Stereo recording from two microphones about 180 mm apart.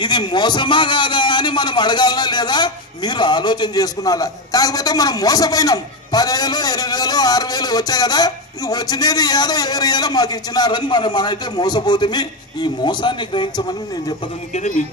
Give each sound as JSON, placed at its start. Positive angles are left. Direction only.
{"t": 0.0, "sound": "a man's voice", "side_deg": 25}
{"t": 14.5, "sound": "a man's voice", "side_deg": 40}